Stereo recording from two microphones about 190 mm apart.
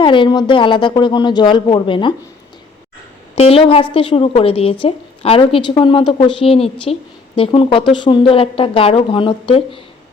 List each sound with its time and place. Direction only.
0.0 s a woman's voice: 25° left (ahead or behind)
3.3 s a woman's voice: 30° left (ahead or behind)